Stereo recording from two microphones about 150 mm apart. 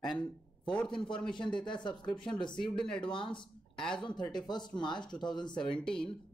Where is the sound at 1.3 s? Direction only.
30° left (ahead or behind).